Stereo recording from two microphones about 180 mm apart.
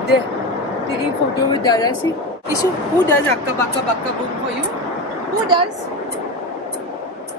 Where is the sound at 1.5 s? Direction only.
20° left (ahead or behind).